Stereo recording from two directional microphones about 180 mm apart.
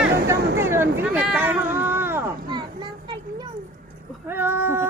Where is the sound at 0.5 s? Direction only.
15° right (ahead or behind).